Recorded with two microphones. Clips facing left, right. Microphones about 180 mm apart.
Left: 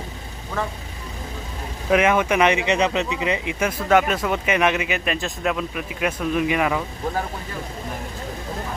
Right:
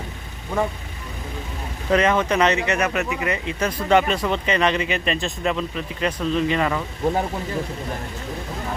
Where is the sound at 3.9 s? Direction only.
5° left (ahead or behind).